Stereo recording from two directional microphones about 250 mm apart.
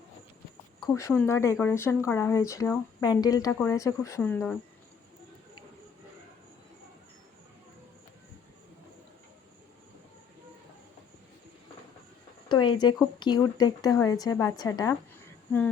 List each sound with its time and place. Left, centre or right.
0.9 s a woman's voice: centre
12.5 s a sound: centre
13.0 s a woman's voice: centre